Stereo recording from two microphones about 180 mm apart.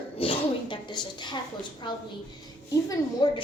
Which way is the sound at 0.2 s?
30° left (ahead or behind).